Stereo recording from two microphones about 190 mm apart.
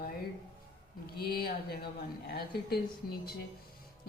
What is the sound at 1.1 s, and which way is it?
Speech, 55° left (ahead or behind).